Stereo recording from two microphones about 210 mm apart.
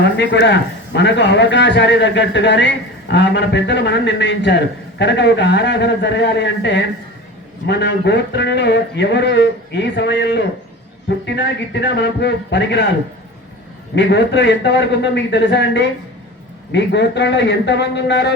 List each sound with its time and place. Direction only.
0.2 s a man's voice: 55° left (ahead or behind)
13.9 s a man's voice: 55° left (ahead or behind)